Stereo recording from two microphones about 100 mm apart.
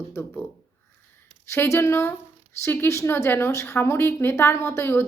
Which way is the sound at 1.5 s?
25° left (ahead or behind).